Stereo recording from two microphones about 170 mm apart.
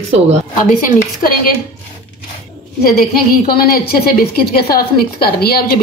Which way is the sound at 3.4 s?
60° left (ahead or behind).